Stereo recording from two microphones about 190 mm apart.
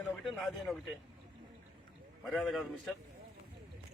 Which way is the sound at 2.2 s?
Centre (ahead or behind).